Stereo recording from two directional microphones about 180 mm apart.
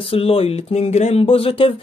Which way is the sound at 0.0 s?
30° left (ahead or behind).